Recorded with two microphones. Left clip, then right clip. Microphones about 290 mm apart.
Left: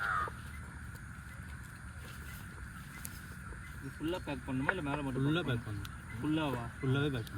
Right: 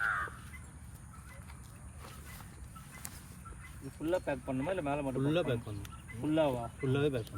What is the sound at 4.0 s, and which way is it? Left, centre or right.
Speech, centre.